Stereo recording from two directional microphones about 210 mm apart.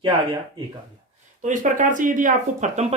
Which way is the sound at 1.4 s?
35° right (ahead or behind).